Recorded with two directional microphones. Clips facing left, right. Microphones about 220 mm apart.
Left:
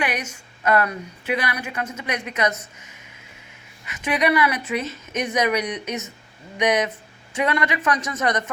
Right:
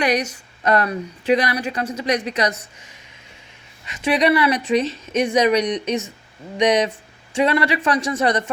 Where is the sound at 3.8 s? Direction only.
30° right (ahead or behind).